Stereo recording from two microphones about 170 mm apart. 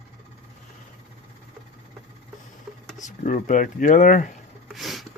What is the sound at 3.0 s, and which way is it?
Speech, 45° left (ahead or behind).